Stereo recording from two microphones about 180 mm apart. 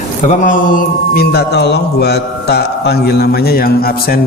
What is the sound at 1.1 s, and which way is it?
A man's voice, 60° left (ahead or behind).